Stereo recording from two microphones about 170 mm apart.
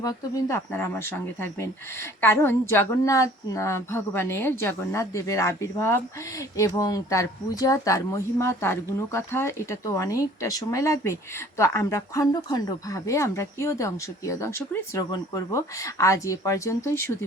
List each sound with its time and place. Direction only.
0.0 s a woman's voice: 20° left (ahead or behind)